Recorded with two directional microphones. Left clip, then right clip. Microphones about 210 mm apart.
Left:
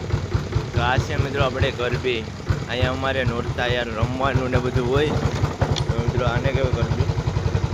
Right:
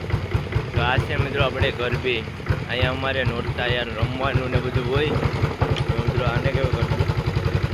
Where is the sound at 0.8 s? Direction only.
5° left (ahead or behind).